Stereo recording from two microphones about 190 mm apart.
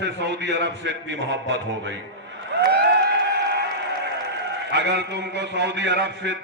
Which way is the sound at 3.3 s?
60° right (ahead or behind).